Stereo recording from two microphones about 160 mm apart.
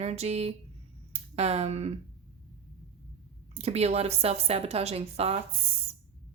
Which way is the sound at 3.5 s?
40° right (ahead or behind).